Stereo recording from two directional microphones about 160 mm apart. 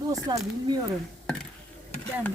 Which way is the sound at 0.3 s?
20° right (ahead or behind).